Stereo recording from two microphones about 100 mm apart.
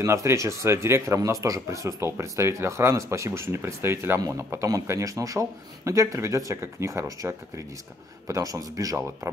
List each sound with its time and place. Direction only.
0.0 s a man's voice: 30° right (ahead or behind)